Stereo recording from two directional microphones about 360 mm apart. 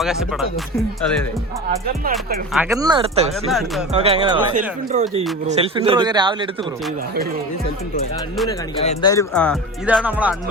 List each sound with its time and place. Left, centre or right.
0.0 s speech: centre
2.5 s speech: centre
3.4 s speech: centre
3.9 s speech: centre
8.8 s speech: centre